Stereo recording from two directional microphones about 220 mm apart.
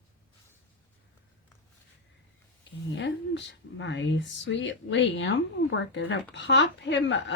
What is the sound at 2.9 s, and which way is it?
Speech, 55° left (ahead or behind).